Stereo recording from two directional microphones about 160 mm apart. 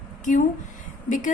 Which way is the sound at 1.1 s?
55° left (ahead or behind).